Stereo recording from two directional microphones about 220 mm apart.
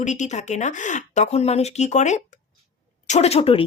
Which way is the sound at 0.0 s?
35° left (ahead or behind).